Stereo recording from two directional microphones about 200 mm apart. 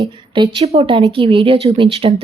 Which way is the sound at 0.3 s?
25° right (ahead or behind).